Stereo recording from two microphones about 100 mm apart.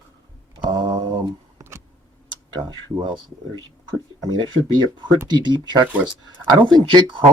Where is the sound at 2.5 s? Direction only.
45° right (ahead or behind).